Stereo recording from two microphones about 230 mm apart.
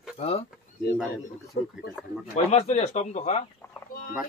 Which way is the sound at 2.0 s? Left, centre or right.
Centre.